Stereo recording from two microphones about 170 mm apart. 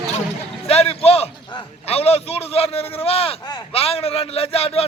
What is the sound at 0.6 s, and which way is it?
A man's voice, 35° left (ahead or behind).